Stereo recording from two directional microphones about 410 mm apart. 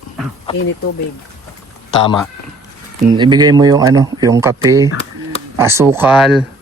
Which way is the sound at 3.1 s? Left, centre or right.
Centre.